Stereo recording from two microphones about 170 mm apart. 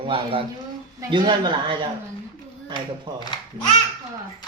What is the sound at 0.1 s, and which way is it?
A man's voice, 30° right (ahead or behind).